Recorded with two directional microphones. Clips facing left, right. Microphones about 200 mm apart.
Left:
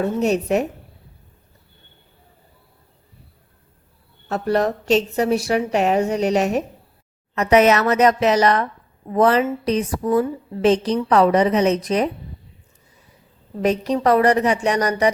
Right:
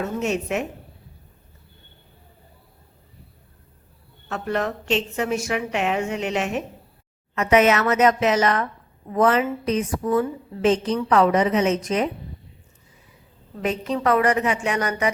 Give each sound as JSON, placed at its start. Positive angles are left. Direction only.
{"t": 0.0, "sound": "a woman's voice", "side_deg": 35}
{"t": 4.3, "sound": "a woman's voice", "side_deg": 35}
{"t": 13.6, "sound": "a woman's voice", "side_deg": 40}